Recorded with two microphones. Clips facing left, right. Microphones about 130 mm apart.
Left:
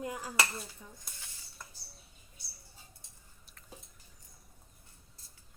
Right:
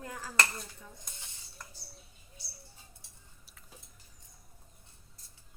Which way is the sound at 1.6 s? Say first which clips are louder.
Right 1 dB; 5° left (ahead or behind).